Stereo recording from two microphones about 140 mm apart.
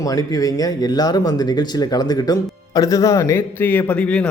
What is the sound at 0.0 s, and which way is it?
Speech, 25° left (ahead or behind).